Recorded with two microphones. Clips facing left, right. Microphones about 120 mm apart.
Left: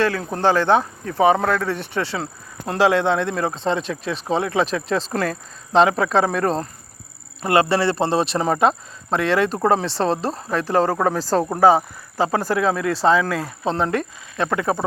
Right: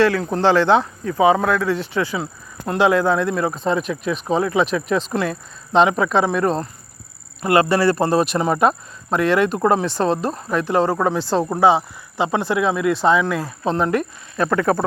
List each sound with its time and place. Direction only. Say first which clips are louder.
0.4 s speech: right 1 dB; 45° left (ahead or behind)
2.6 s speech: right 1 dB; 30° left (ahead or behind)